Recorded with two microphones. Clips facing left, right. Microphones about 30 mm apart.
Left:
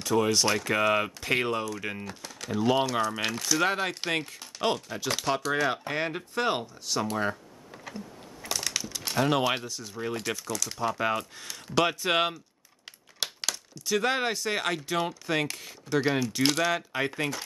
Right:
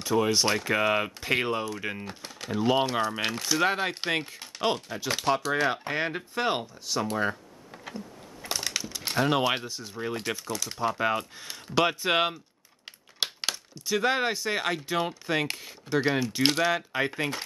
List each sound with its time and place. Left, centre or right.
0.0 s speech: centre
5.3 s speech: right
5.7 s speech: centre
8.5 s crushing: centre
9.2 s speech: centre
9.9 s speech: centre
12.8 s crumpling: centre
13.8 s speech: centre